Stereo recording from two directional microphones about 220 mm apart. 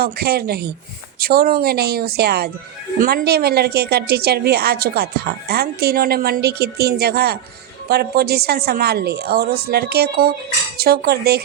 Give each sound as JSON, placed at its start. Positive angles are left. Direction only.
{"t": 0.0, "sound": "a woman's voice", "side_deg": -45}